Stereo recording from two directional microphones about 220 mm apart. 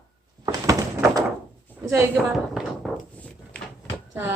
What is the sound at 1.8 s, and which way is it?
Speech, 15° right (ahead or behind).